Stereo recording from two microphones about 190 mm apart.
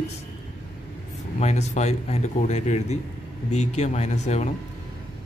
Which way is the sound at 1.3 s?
35° left (ahead or behind).